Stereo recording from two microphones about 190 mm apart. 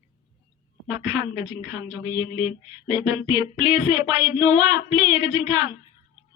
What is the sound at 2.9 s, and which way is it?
Speech, 20° right (ahead or behind).